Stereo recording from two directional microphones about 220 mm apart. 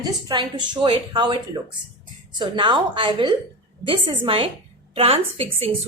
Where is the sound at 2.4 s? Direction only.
20° right (ahead or behind).